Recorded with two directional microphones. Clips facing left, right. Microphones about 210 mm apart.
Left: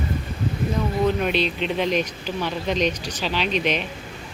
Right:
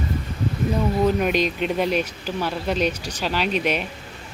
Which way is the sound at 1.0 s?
10° right (ahead or behind).